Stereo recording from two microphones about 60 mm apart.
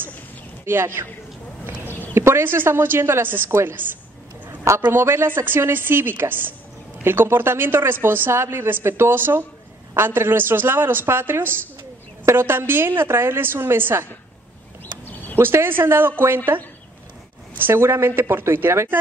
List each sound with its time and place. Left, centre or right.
0.7 s a woman's voice: right
1.6 s a sound: left
2.1 s a woman's voice: right
3.4 s speech: right
4.9 s a woman's voice: right
15.3 s a woman's voice: right
17.6 s speech: right